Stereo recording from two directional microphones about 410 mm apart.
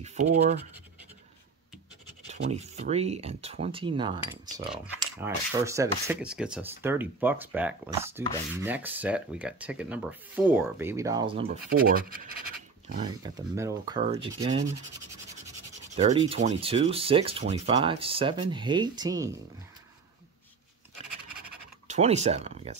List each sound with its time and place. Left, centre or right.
0.0 s speech: centre
2.2 s speech: centre
15.9 s speech: centre
21.8 s speech: centre